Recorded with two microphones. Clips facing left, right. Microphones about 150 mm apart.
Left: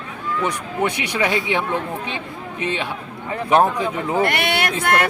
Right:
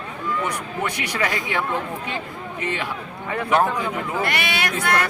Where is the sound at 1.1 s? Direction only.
20° left (ahead or behind).